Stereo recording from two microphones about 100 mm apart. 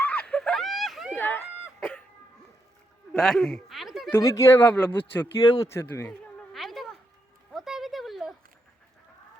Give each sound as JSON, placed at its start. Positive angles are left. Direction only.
{"t": 0.0, "sound": "screaming", "side_deg": 15}
{"t": 1.1, "sound": "a sound", "side_deg": 20}
{"t": 3.1, "sound": "speech", "side_deg": 5}
{"t": 4.2, "sound": "speech", "side_deg": 35}
{"t": 4.6, "sound": "a man's voice", "side_deg": 15}
{"t": 5.4, "sound": "speech", "side_deg": 40}
{"t": 5.7, "sound": "a man's voice", "side_deg": 25}
{"t": 6.1, "sound": "a sound", "side_deg": 0}